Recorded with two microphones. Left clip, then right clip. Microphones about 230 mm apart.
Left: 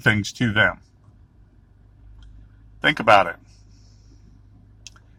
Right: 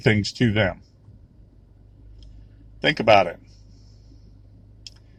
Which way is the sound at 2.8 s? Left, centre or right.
Left.